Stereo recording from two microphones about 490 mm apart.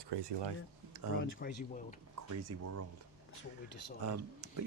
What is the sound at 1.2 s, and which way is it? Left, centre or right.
Speech, centre.